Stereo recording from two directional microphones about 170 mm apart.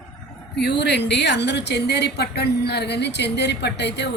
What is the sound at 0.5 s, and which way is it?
A woman's voice, 80° left.